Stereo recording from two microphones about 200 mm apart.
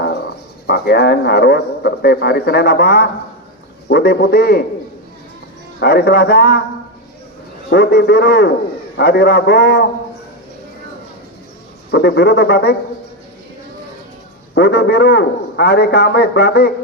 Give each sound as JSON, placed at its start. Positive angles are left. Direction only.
{"t": 0.7, "sound": "speech", "side_deg": 55}
{"t": 5.8, "sound": "speech", "side_deg": 55}
{"t": 7.7, "sound": "speech", "side_deg": 55}
{"t": 11.9, "sound": "speech", "side_deg": 55}
{"t": 14.5, "sound": "a man's voice", "side_deg": 55}